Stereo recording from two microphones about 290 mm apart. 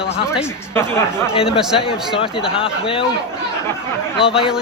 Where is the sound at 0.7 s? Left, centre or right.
Centre.